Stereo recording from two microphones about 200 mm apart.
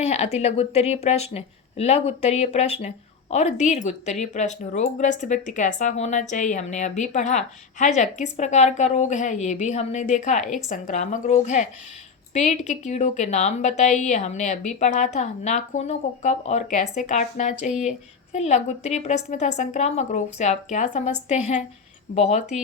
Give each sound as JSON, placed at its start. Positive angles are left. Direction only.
{"t": 0.0, "sound": "speech", "side_deg": 35}